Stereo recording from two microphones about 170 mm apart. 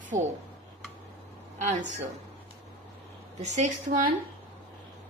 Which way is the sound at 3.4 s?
45° right (ahead or behind).